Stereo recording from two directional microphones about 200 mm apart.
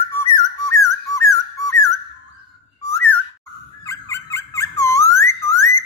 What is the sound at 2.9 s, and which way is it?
Whistle, 10° left (ahead or behind).